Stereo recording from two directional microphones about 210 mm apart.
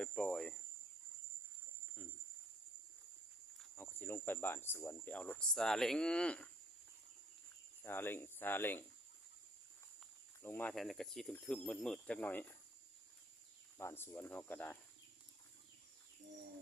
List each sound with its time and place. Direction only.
0.0 s cricket: centre (ahead or behind)
3.6 s speech: 10° left (ahead or behind)
7.9 s speech: 10° left (ahead or behind)
10.4 s speech: 10° left (ahead or behind)
13.7 s speech: 10° left (ahead or behind)